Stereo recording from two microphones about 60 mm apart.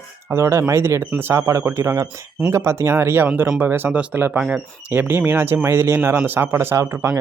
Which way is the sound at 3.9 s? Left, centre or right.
Right.